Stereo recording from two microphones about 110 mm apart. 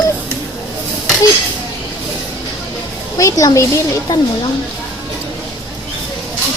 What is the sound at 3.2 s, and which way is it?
Speech, 30° left (ahead or behind).